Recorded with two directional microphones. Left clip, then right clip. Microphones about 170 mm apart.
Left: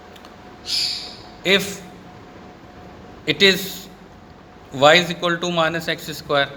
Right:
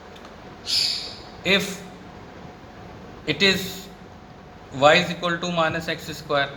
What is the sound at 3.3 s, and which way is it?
A man's voice, 45° left (ahead or behind).